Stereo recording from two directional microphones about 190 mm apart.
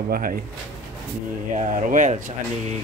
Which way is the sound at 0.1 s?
50° right (ahead or behind).